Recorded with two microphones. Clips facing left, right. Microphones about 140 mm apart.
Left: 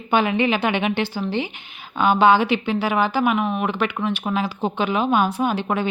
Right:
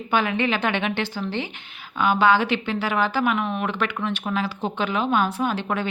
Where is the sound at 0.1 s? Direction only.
20° left (ahead or behind).